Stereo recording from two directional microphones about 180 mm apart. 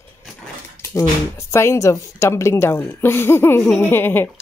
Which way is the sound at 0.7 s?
15° left (ahead or behind).